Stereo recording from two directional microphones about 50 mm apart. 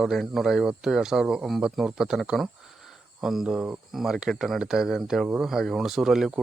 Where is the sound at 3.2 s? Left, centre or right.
Centre.